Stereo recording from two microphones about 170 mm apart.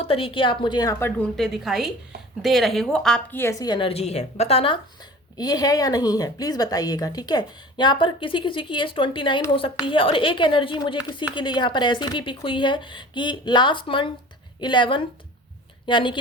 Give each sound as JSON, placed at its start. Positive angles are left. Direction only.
{"t": 0.0, "sound": "speech", "side_deg": 35}
{"t": 1.4, "sound": "speech", "side_deg": 0}
{"t": 3.7, "sound": "speech", "side_deg": 30}